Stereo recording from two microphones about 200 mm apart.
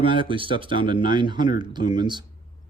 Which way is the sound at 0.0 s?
25° right (ahead or behind).